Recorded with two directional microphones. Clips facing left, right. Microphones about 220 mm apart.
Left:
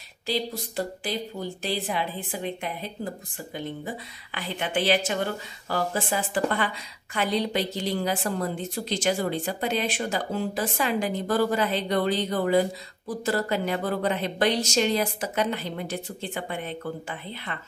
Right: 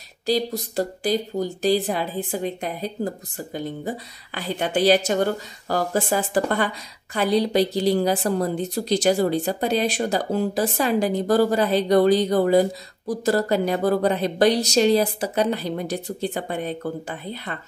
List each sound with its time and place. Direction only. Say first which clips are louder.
0.3 s a woman's voice: right 6 dB; 40° right (ahead or behind)